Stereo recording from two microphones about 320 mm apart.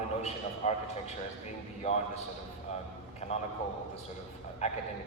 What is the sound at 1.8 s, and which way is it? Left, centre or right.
Speech, centre.